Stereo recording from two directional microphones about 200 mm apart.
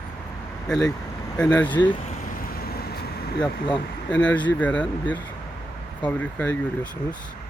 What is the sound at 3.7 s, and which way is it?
Speech, 5° left (ahead or behind).